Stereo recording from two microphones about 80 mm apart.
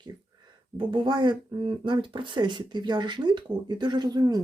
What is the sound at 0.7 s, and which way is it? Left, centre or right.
Speech, right.